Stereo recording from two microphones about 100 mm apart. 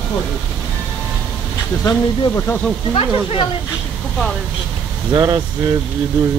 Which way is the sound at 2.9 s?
75° left (ahead or behind).